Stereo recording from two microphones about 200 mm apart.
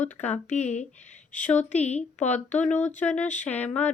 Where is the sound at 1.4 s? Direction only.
5° left (ahead or behind).